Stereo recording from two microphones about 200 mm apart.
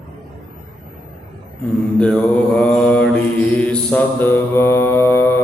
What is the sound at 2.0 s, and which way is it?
Mantra, 5° left (ahead or behind).